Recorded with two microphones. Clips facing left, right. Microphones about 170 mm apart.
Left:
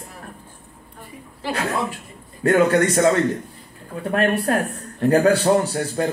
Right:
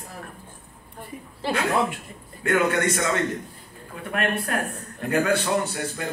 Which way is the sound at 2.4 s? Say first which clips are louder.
Left 6 dB; 35° left (ahead or behind).